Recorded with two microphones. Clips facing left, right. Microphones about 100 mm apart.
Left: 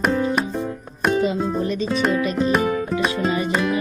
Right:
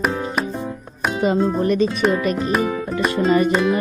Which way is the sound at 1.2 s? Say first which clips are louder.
Right 3 dB; 60° right (ahead or behind).